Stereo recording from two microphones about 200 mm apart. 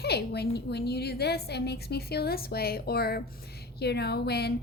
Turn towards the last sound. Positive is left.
turn(degrees=55)  # may be behind; listen again after turning